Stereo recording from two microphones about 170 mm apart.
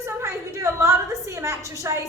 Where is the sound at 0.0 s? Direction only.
15° right (ahead or behind).